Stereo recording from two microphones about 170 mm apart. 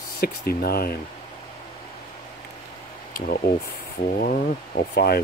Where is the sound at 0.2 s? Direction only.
65° left (ahead or behind).